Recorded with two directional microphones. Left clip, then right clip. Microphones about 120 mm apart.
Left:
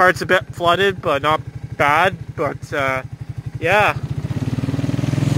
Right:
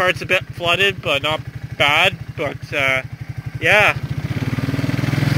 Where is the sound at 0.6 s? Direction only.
80° left.